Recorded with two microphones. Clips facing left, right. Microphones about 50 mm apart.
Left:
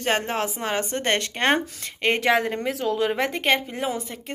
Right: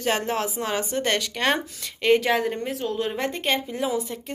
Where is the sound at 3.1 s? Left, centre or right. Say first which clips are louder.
Left 3 dB; left.